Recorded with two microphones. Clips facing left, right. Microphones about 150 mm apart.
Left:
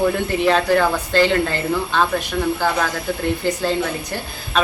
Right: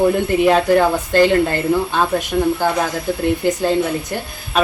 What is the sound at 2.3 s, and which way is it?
Speech, 25° right (ahead or behind).